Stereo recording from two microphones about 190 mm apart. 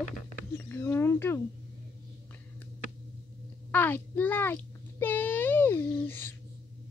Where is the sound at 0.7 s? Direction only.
15° left (ahead or behind).